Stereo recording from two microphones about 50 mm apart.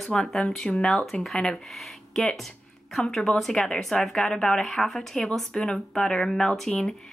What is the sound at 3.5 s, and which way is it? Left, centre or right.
Speech, centre.